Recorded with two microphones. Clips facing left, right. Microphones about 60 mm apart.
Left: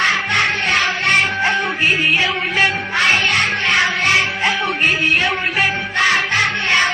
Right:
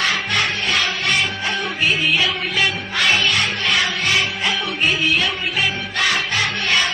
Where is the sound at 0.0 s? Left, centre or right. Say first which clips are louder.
Left 4 dB; left.